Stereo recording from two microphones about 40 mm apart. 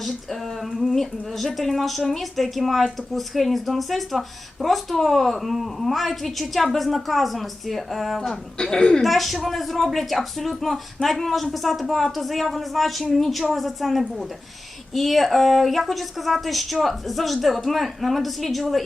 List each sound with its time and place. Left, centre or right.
0.7 s a woman's voice: centre
8.2 s speech: centre
9.0 s a woman's voice: centre